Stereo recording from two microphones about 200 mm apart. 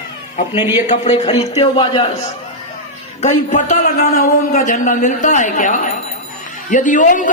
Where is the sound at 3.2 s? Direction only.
40° left (ahead or behind).